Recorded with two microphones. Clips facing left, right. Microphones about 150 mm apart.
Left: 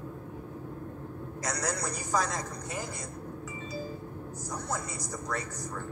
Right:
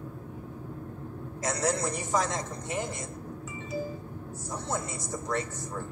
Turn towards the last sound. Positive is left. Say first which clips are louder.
# right 3 dB
turn(degrees=-25)  # may be behind; listen again after turning